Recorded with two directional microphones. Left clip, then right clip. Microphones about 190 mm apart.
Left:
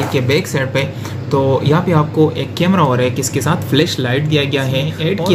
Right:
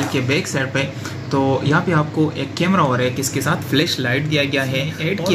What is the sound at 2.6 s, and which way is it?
Speech, 15° left (ahead or behind).